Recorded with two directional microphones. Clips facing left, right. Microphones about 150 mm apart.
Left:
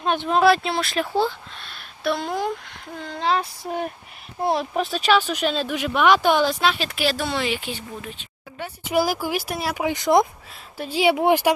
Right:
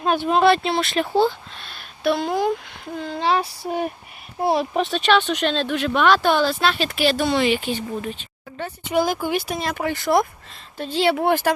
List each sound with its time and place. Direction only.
0.0 s speech: 5° right (ahead or behind); by 11.5 s 15° left (ahead or behind)